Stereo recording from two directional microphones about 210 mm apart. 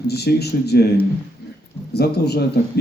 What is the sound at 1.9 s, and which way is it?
Speech, 50° left (ahead or behind).